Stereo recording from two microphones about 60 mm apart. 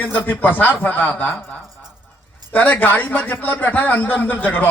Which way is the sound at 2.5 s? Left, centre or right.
Left.